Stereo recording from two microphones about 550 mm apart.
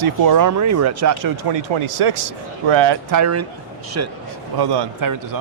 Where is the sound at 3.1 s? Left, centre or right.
Right.